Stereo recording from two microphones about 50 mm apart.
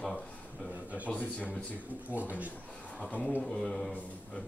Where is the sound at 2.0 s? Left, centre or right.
Right.